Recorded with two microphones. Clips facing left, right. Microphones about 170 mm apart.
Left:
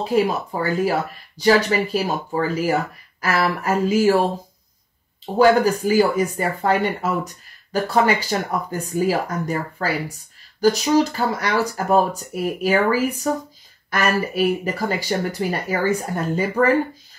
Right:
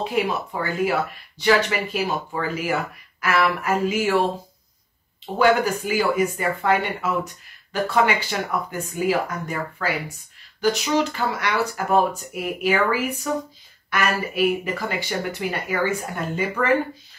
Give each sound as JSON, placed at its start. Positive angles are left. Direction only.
{"t": 0.1, "sound": "speech", "side_deg": 35}
{"t": 5.2, "sound": "speech", "side_deg": 35}